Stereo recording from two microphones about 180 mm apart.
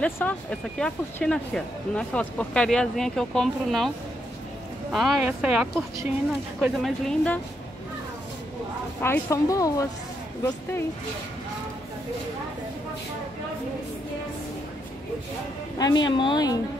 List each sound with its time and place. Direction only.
0.0 s speech: 10° left (ahead or behind)
4.9 s speech: centre (ahead or behind)
9.0 s speech: 15° left (ahead or behind)
15.8 s speech: 25° left (ahead or behind)